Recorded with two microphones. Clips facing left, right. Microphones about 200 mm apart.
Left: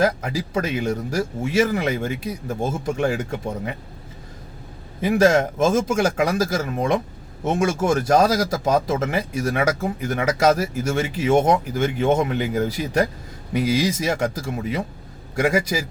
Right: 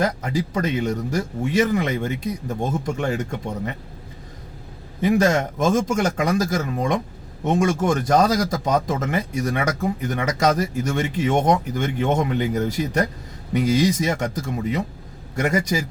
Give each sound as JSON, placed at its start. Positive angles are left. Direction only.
{"t": 0.0, "sound": "speech", "side_deg": 10}
{"t": 4.9, "sound": "speech", "side_deg": 5}